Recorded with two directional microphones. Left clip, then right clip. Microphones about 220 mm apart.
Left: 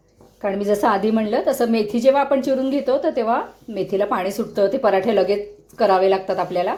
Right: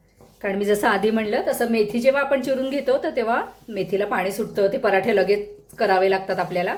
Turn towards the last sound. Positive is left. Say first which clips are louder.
# left 2 dB
turn(degrees=15)  # may be behind; listen again after turning